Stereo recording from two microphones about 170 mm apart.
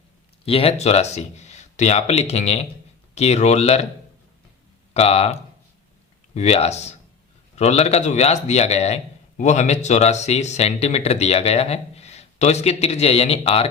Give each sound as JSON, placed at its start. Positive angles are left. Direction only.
{"t": 0.4, "sound": "speech", "side_deg": 35}
{"t": 4.9, "sound": "speech", "side_deg": 35}